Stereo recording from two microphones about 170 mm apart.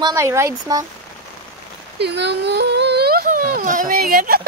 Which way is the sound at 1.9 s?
85° right.